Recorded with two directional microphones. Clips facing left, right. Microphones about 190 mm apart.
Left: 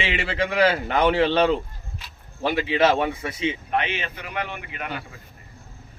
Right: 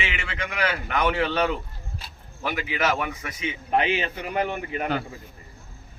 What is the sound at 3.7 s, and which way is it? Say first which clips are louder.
Speech: right 3 dB; 35° right (ahead or behind).